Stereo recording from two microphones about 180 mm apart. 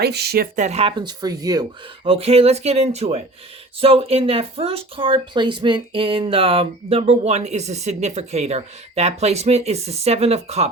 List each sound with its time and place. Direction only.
0.0 s speech: 65° right (ahead or behind)
0.5 s speech: 40° right (ahead or behind); by 1.6 s 20° right (ahead or behind)
2.0 s speech: 35° right (ahead or behind)